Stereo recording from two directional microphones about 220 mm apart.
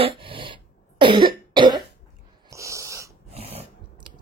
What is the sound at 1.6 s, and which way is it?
Cough, 20° right (ahead or behind).